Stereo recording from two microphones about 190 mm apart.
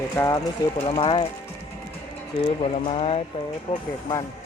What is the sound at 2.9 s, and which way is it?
Speech, 30° left (ahead or behind).